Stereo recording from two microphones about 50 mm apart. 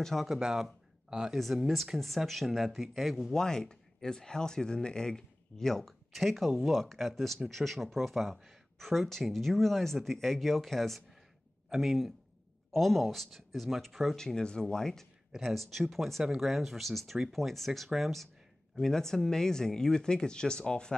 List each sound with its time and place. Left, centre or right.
0.0 s speech: centre
0.4 s speech: centre
3.3 s speech: centre
15.3 s speech: centre